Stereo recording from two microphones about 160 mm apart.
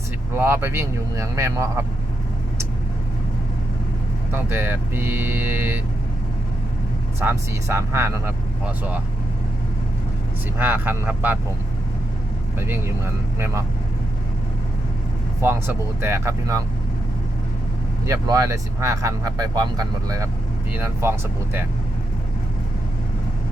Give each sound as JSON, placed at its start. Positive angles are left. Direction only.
{"t": 0.3, "sound": "speech", "side_deg": -15}
{"t": 4.3, "sound": "speech", "side_deg": -10}
{"t": 7.2, "sound": "speech", "side_deg": -15}
{"t": 10.6, "sound": "speech", "side_deg": -10}
{"t": 12.5, "sound": "speech", "side_deg": -15}
{"t": 15.4, "sound": "speech", "side_deg": -15}
{"t": 18.0, "sound": "speech", "side_deg": -20}